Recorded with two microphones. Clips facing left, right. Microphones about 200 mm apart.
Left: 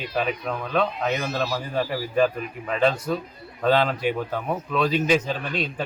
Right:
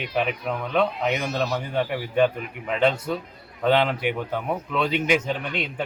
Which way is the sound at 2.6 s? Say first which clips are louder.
Even; 20° right (ahead or behind).